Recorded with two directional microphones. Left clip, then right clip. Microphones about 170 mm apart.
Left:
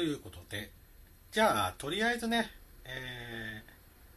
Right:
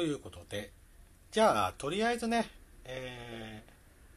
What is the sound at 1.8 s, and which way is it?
Speech, 10° right (ahead or behind).